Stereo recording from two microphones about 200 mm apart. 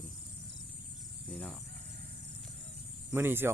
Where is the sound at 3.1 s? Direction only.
10° right (ahead or behind).